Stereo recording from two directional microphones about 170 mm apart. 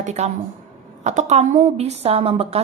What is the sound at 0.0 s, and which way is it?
A woman's voice, 45° right (ahead or behind).